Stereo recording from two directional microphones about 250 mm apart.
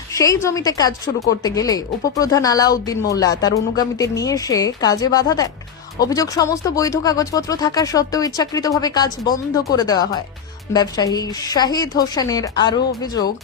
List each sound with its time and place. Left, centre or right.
0.1 s a woman's voice: centre